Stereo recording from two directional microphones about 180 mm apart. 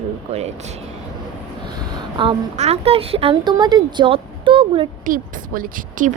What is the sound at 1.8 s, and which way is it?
A woman's voice, 25° right (ahead or behind).